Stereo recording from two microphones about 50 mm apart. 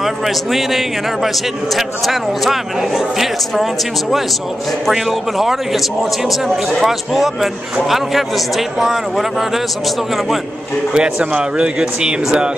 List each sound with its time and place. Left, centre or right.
0.0 s a man's voice: centre
4.8 s a man's voice: centre
10.9 s a man's voice: centre